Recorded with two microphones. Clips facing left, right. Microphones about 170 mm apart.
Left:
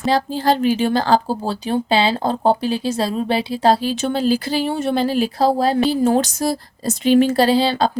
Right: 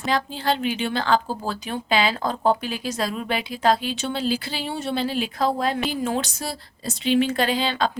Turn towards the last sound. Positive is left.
turn(degrees=35)  # may be behind; listen again after turning